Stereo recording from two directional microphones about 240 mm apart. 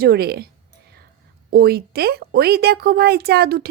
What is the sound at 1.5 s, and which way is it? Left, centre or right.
A woman's voice, right.